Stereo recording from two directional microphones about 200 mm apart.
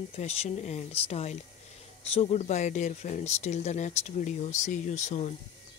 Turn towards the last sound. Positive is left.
turn(degrees=35)  # may be behind; listen again after turning